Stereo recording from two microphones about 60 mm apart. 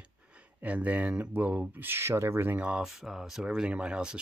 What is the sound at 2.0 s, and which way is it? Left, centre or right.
Speech, right.